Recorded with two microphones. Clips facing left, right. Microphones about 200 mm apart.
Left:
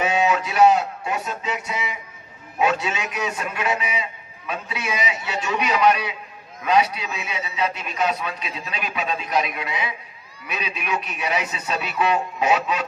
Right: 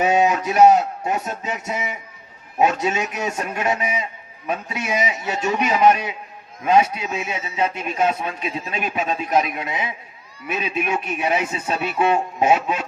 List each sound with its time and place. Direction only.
0.0 s a man's voice: 40° right (ahead or behind)